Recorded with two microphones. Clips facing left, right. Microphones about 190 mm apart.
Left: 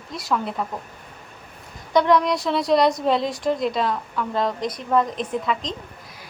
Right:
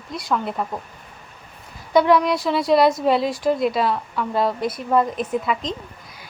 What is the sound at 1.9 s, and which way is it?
A woman's voice, 5° right (ahead or behind).